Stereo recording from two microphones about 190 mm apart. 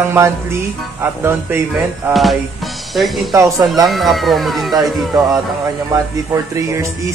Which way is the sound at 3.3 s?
15° right (ahead or behind).